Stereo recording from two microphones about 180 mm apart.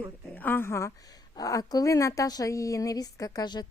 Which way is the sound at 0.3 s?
10° left (ahead or behind).